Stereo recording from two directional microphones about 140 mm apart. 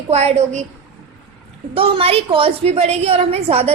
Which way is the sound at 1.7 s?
45° right (ahead or behind).